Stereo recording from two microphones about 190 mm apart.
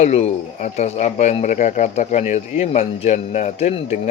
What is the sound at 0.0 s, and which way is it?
Speech, 35° left (ahead or behind).